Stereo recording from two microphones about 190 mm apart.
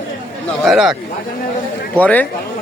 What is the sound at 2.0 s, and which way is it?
Speech, 10° left (ahead or behind).